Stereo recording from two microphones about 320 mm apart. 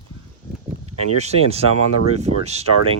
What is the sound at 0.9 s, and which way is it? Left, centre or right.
Speech, centre.